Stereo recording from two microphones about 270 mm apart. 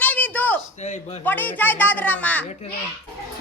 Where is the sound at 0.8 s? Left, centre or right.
Left.